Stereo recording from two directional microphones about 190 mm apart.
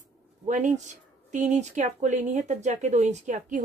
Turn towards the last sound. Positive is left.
turn(degrees=-40)  # may be behind; listen again after turning